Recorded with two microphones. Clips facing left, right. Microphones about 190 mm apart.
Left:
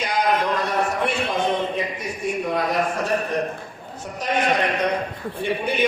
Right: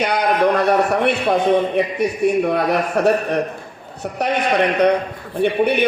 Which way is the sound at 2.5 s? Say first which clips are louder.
Right 4 dB; 65° right (ahead or behind).